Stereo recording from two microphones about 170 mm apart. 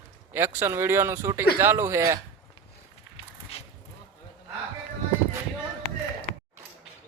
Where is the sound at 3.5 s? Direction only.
35° left (ahead or behind).